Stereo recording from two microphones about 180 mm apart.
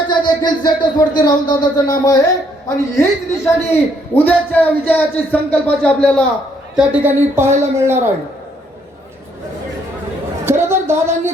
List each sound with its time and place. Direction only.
0.1 s a man's voice: 25° left (ahead or behind); by 6.2 s 5° left (ahead or behind)
6.7 s speech: 10° right (ahead or behind)
10.4 s a sound: 15° right (ahead or behind)